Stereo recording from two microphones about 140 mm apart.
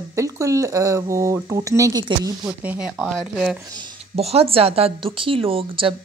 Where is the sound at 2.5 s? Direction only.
5° right (ahead or behind).